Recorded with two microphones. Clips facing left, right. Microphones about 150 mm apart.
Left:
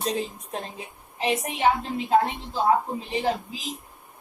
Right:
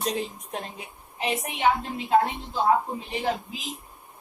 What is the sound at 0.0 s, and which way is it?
A woman's voice, 30° left (ahead or behind).